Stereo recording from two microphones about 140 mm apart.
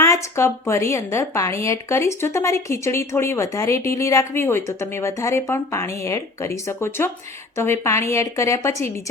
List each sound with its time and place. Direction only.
0.0 s a woman's voice: 20° left (ahead or behind)